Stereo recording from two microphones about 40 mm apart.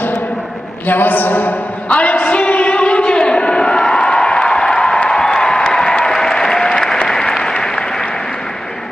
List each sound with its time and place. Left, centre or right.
0.8 s a man's voice: left
2.0 s a sound: left; by 5.0 s centre
5.1 s applause: centre